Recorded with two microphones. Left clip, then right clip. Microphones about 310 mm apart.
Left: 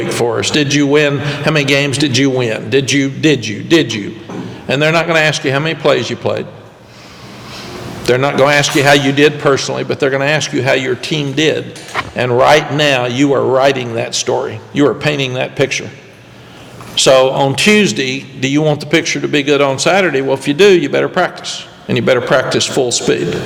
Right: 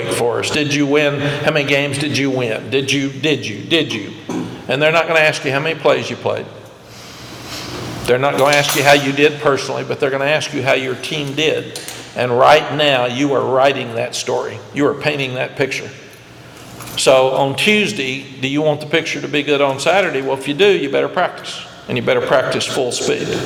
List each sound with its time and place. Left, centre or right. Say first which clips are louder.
0.1 s a man's voice: left 2 dB; left
8.0 s a man's voice: left 2 dB; left
16.9 s a man's voice: left 3 dB; left